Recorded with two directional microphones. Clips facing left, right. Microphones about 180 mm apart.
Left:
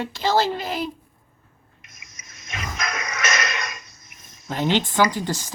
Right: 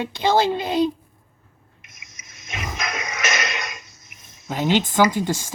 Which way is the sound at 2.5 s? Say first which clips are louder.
Right 1 dB; 25° right (ahead or behind).